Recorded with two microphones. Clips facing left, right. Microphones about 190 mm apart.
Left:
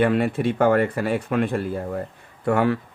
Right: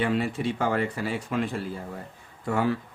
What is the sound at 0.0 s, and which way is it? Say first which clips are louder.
Speech: left 6 dB; 55° left (ahead or behind).